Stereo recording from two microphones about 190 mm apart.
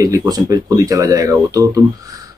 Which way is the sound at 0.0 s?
20° right (ahead or behind).